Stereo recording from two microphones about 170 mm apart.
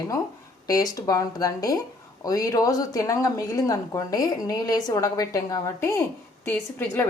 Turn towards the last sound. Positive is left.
turn(degrees=10)  # may be behind; listen again after turning